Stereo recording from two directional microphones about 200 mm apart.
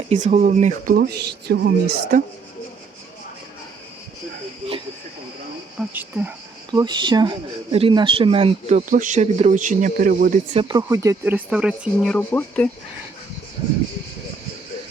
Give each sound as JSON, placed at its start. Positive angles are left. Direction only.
{"t": 0.1, "sound": "speech", "side_deg": -35}
{"t": 5.9, "sound": "speech", "side_deg": -10}
{"t": 6.7, "sound": "speech", "side_deg": -25}
{"t": 8.9, "sound": "speech", "side_deg": -40}
{"t": 10.5, "sound": "speech", "side_deg": -25}
{"t": 12.1, "sound": "speech", "side_deg": 10}